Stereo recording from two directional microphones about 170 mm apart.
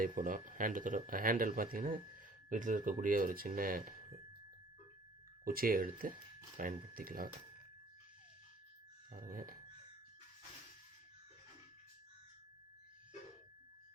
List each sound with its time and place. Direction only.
0.0 s speech: 50° right (ahead or behind)
5.5 s speech: 55° right (ahead or behind)
9.1 s speech: 50° right (ahead or behind)